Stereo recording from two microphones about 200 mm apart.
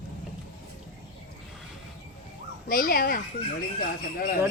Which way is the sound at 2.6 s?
45° left (ahead or behind).